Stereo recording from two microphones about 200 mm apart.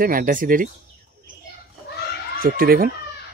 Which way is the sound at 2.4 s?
45° right (ahead or behind).